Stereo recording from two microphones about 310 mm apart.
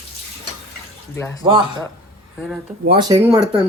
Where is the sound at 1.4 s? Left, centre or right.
Centre.